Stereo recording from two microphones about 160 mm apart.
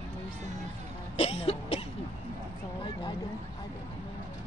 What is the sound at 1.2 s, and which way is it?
Cough, 40° left (ahead or behind).